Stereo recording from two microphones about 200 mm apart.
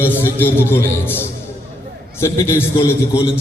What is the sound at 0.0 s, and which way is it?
A man's voice, 10° left (ahead or behind).